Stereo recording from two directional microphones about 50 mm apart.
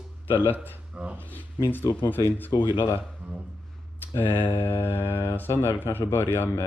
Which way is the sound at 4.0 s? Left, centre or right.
Left.